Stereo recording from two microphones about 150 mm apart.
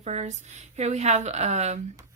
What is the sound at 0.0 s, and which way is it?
Speech, 50° right (ahead or behind).